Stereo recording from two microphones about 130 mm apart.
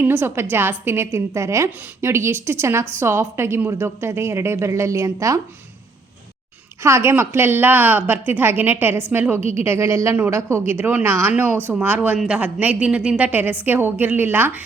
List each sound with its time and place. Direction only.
0.0 s a woman's voice: 15° right (ahead or behind)
6.8 s a woman's voice: 20° right (ahead or behind)